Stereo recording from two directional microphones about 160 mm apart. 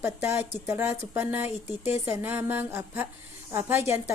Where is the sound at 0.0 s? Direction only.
15° right (ahead or behind).